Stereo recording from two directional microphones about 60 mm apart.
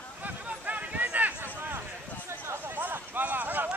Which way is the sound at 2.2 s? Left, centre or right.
Right.